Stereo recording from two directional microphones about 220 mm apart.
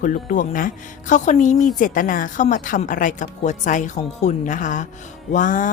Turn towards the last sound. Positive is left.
turn(degrees=35)  # may be behind; listen again after turning